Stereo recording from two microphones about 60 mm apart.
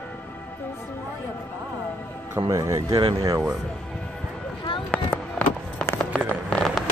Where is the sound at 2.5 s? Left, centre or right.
Right.